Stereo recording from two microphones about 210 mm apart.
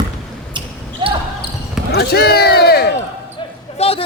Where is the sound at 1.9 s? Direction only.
50° left (ahead or behind).